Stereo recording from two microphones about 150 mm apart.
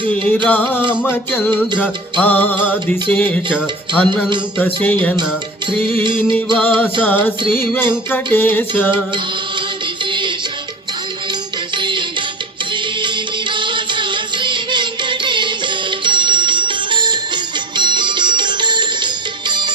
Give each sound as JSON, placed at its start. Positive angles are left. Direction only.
{"t": 0.4, "sound": "music", "side_deg": 10}
{"t": 6.6, "sound": "music", "side_deg": 10}
{"t": 10.1, "sound": "music", "side_deg": -30}
{"t": 11.8, "sound": "music", "side_deg": -30}
{"t": 13.5, "sound": "music", "side_deg": -30}